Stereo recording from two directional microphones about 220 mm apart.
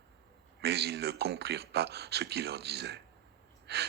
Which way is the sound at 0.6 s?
50° right (ahead or behind).